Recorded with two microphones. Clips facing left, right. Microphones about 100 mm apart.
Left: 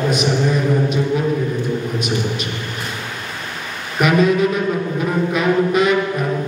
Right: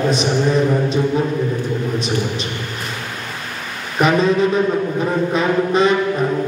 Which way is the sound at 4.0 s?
30° right (ahead or behind).